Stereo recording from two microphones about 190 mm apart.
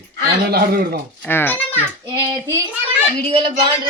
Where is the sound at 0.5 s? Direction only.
55° right (ahead or behind).